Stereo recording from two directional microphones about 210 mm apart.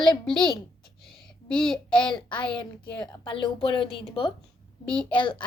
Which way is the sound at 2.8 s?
20° left (ahead or behind).